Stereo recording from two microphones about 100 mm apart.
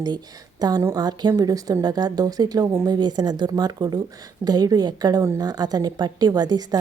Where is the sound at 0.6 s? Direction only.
40° right (ahead or behind).